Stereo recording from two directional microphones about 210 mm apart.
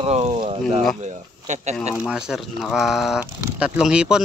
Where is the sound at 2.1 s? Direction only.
Centre (ahead or behind).